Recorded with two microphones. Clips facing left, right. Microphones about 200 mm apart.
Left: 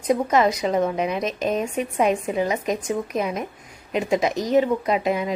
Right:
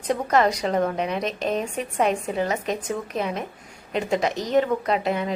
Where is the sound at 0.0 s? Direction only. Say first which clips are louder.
Left 2 dB; 10° left (ahead or behind).